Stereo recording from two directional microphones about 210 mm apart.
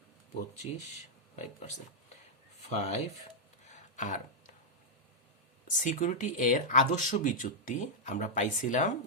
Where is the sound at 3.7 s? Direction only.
35° left (ahead or behind).